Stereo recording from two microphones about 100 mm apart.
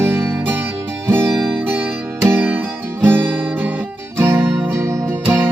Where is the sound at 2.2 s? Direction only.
20° right (ahead or behind).